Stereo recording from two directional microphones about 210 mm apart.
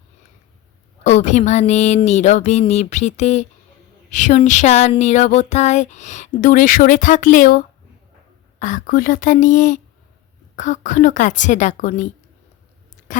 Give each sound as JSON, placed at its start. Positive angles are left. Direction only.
{"t": 1.0, "sound": "speech", "side_deg": 35}